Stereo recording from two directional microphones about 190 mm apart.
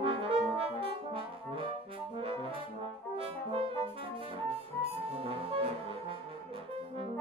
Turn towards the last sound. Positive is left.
turn(degrees=-30)  # may be behind; listen again after turning